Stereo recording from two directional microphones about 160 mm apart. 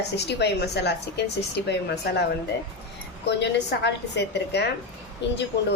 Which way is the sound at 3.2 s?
90° left.